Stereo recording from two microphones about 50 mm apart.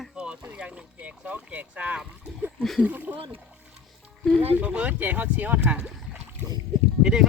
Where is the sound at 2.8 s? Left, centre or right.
Right.